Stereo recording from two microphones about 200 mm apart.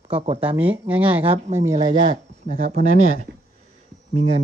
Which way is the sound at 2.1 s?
40° right (ahead or behind).